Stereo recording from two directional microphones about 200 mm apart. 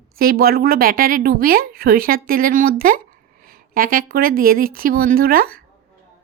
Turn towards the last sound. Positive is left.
turn(degrees=-45)  # may be behind; listen again after turning